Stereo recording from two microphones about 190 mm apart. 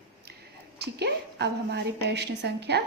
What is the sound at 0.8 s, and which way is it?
A woman's voice, 60° right (ahead or behind).